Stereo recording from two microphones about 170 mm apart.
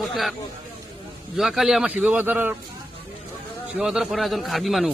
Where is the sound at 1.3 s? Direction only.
Centre (ahead or behind).